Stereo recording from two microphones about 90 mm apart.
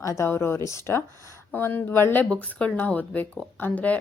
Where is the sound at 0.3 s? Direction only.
25° left (ahead or behind).